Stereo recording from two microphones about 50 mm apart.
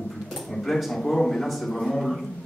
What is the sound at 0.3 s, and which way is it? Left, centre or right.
Speech, centre.